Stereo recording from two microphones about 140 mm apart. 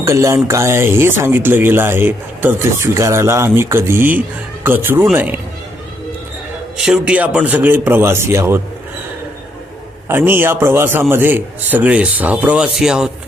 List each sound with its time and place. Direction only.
0.0 s speech: 20° right (ahead or behind)
6.7 s speech: 5° right (ahead or behind)
10.1 s speech: 15° right (ahead or behind)